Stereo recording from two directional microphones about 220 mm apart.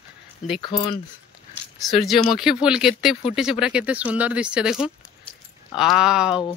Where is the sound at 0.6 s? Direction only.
20° left (ahead or behind).